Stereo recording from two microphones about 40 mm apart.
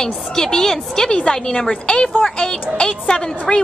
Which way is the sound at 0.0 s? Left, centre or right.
Centre.